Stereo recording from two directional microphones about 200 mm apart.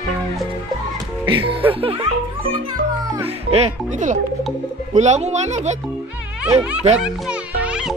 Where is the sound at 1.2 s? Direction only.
25° right (ahead or behind).